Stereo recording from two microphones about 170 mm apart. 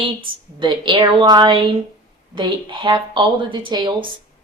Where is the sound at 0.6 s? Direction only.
30° right (ahead or behind).